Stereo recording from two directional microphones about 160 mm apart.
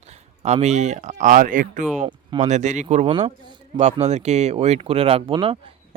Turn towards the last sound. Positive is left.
turn(degrees=-35)  # may be behind; listen again after turning